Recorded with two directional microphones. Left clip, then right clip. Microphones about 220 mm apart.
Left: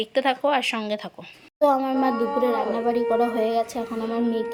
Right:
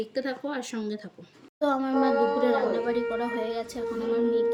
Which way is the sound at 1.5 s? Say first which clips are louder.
Left 5 dB; 35° left (ahead or behind).